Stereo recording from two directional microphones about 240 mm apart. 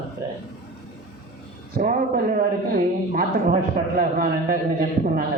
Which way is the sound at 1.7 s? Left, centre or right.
Right.